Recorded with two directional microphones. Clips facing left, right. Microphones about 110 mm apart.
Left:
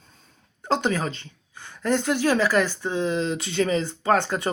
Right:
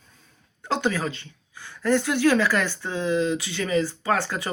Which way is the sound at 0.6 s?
25° left (ahead or behind).